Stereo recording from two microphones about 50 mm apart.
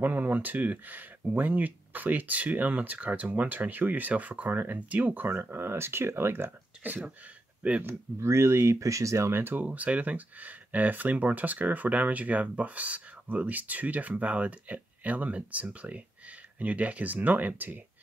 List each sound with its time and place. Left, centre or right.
0.0 s speech: right
5.3 s speech: right
6.8 s speech: right
7.8 s speech: right
9.3 s speech: right
9.7 s speech: right